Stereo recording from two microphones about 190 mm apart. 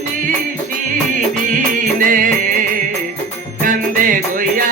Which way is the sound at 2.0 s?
45° right (ahead or behind).